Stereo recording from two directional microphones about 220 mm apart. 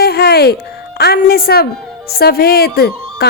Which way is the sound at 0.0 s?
45° left (ahead or behind).